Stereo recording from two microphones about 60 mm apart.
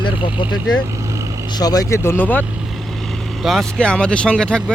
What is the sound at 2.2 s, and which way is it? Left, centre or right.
Speech, left.